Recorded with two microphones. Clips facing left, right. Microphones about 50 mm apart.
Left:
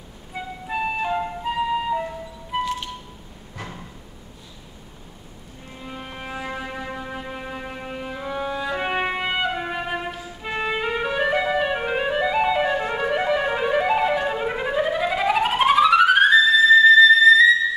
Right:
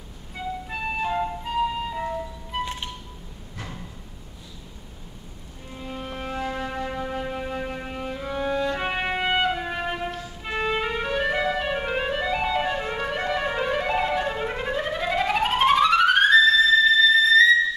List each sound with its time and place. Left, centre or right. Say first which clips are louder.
0.3 s music: left 2 dB; centre
2.6 s music: left 4 dB; right
5.8 s music: right 2 dB; centre